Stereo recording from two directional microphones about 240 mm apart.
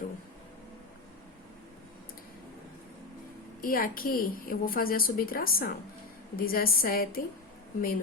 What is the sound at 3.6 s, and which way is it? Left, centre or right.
A woman's voice, left.